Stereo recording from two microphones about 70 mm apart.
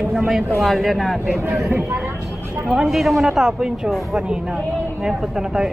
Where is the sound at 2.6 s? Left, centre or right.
Centre.